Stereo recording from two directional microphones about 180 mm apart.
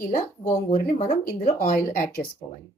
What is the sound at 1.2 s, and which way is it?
Speech, 55° left (ahead or behind).